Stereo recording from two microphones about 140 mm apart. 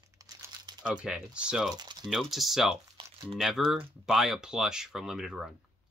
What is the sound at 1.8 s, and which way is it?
Typing, 30° right (ahead or behind).